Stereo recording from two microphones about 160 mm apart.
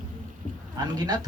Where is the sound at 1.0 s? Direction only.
25° right (ahead or behind).